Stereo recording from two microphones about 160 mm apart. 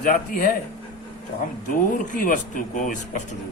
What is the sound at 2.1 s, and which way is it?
Speech, 55° left (ahead or behind).